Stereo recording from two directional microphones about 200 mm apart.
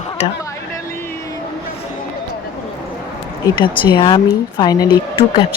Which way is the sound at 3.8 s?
25° left (ahead or behind).